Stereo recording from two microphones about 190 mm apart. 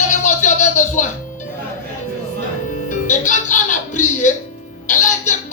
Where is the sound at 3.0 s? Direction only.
40° left (ahead or behind).